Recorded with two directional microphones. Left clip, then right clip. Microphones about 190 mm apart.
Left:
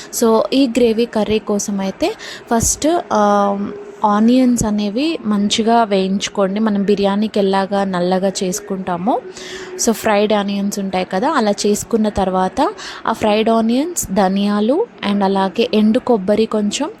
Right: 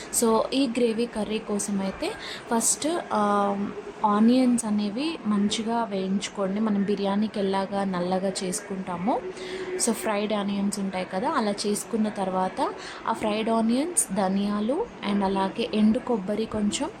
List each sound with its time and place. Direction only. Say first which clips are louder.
0.2 s a woman's voice: left 9 dB; 30° left (ahead or behind)